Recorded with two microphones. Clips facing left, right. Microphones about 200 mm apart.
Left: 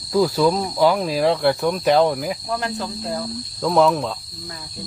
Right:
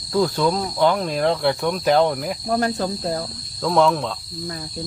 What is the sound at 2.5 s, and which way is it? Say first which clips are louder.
Cricket: right 4 dB; 40° right (ahead or behind).